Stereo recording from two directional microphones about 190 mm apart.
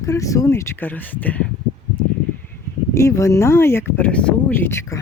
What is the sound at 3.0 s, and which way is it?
Speech, 15° left (ahead or behind).